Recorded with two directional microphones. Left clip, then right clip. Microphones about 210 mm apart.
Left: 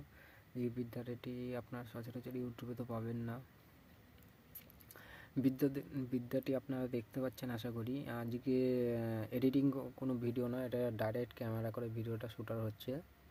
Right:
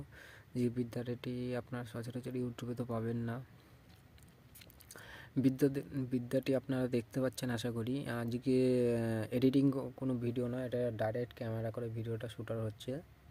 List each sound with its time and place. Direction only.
0.5 s speech: 25° right (ahead or behind)
4.9 s speech: 15° right (ahead or behind)